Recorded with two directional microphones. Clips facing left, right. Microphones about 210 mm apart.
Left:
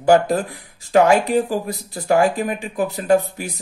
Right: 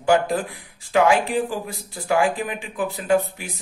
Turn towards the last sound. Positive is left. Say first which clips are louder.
# left 3 dB
turn(degrees=40)  # may be behind; listen again after turning